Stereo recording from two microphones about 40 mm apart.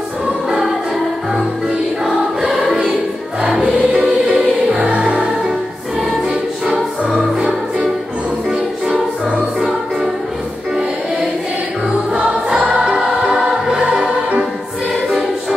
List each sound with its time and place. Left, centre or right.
3.3 s music: right
6.6 s music: right
12.4 s music: right